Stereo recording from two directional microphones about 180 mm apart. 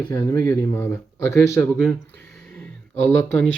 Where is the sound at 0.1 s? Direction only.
20° left (ahead or behind).